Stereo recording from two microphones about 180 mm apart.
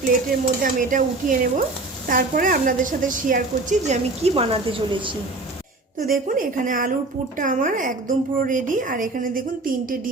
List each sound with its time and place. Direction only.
0.0 s a woman's voice: 50° right (ahead or behind); by 5.1 s 30° right (ahead or behind)
6.1 s a woman's voice: 50° right (ahead or behind)